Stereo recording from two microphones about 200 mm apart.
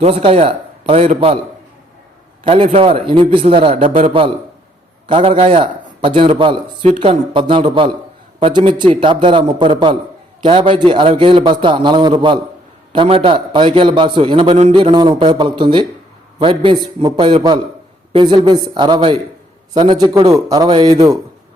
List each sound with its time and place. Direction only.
0.0 s a man's voice: 30° right (ahead or behind)
2.4 s a man's voice: 25° right (ahead or behind)